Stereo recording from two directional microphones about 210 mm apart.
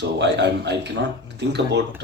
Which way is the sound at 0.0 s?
55° right (ahead or behind).